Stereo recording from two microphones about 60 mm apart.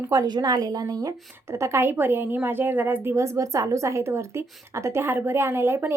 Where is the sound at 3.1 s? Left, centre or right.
Right.